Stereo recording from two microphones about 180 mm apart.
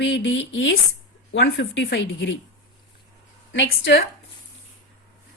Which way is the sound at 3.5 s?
80° left.